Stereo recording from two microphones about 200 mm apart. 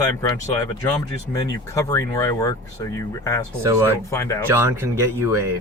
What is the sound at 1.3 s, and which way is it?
Speech, 15° left (ahead or behind).